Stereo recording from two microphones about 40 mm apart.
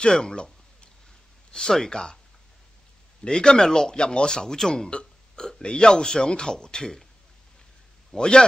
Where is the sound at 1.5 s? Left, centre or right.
Centre.